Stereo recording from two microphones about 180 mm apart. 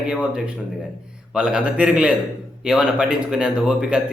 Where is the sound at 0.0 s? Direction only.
5° right (ahead or behind).